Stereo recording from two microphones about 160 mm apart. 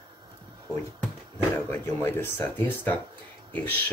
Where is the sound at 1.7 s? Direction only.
15° left (ahead or behind).